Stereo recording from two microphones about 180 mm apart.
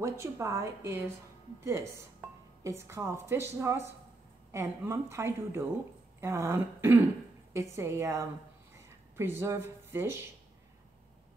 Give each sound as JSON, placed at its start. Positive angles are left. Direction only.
{"t": 0.0, "sound": "a woman's voice", "side_deg": -15}